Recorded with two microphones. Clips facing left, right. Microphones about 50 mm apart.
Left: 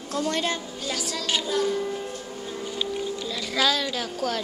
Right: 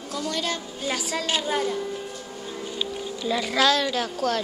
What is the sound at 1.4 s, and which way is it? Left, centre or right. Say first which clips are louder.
Speech: left 2 dB; right.